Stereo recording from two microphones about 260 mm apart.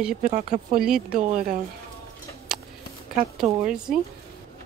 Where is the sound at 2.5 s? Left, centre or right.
Centre.